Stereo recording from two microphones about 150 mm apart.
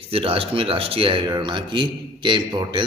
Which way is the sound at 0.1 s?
40° right (ahead or behind).